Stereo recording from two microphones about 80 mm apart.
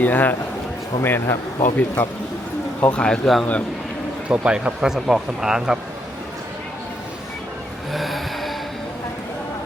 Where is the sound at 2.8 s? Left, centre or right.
Centre.